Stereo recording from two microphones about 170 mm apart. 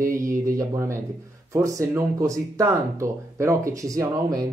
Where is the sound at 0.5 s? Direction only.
20° right (ahead or behind).